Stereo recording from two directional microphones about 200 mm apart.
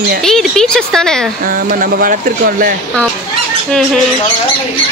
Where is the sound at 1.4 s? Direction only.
45° right (ahead or behind).